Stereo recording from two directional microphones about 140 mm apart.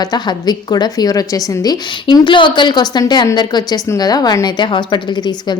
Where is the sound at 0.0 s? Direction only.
30° left (ahead or behind).